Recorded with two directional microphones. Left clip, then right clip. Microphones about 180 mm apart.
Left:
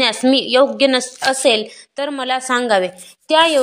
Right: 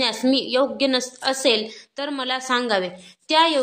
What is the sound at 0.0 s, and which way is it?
A woman's voice, 20° left (ahead or behind).